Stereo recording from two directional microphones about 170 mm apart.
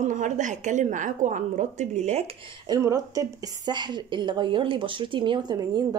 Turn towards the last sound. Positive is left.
turn(degrees=-25)  # may be behind; listen again after turning